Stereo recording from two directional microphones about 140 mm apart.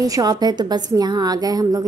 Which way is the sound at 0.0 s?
25° right (ahead or behind).